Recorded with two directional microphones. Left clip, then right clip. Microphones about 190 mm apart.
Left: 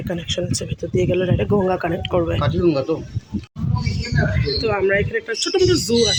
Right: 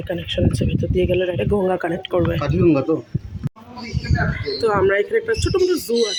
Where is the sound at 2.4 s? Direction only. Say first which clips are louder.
Right 1 dB; 55° right (ahead or behind).